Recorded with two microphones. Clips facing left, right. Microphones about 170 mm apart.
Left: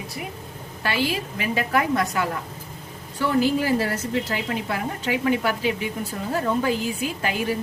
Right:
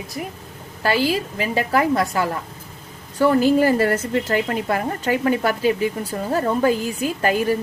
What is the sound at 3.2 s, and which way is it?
A woman's voice, 45° right (ahead or behind).